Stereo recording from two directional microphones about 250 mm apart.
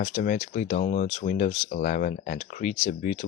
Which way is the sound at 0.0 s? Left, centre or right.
Left.